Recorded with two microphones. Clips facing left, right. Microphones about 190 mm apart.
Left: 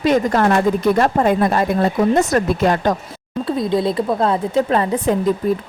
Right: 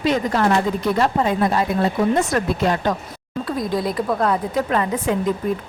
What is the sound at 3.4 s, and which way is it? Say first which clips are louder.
Speech: left 4 dB; 25° left (ahead or behind).